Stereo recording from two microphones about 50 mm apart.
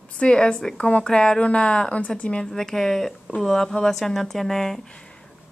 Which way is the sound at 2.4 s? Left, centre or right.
Centre.